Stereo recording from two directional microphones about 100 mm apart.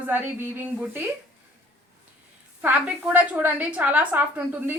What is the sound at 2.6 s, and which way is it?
A woman's voice, 15° right (ahead or behind).